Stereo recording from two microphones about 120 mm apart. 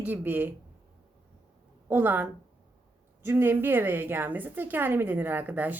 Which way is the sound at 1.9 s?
15° right (ahead or behind).